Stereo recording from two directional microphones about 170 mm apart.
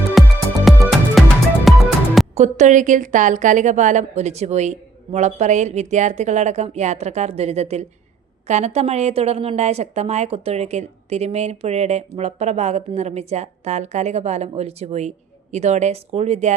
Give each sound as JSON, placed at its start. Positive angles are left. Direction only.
{"t": 0.1, "sound": "music", "side_deg": 0}
{"t": 2.3, "sound": "a woman's voice", "side_deg": -45}